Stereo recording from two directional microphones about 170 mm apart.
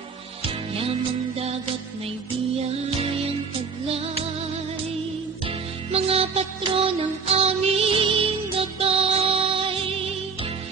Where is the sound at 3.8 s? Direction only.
35° right (ahead or behind).